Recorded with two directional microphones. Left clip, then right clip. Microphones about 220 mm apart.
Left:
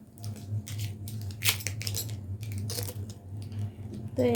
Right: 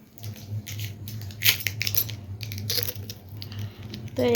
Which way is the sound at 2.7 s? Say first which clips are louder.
Right 10 dB; 10° left (ahead or behind).